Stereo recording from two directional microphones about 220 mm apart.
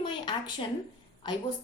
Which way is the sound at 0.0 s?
20° left (ahead or behind).